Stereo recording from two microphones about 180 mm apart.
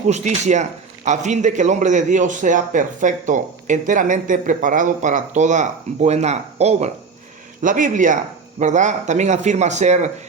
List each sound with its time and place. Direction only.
0.1 s a man's voice: 40° right (ahead or behind)